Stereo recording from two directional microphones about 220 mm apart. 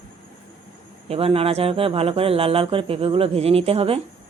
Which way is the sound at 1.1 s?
25° right (ahead or behind).